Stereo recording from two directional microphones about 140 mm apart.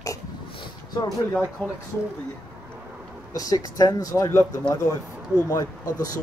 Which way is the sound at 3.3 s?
25° left (ahead or behind).